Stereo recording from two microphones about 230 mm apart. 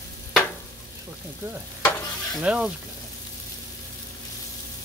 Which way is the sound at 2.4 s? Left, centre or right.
Centre.